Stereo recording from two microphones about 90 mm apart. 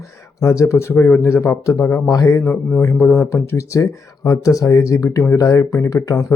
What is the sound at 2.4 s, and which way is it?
Speech, 15° left (ahead or behind).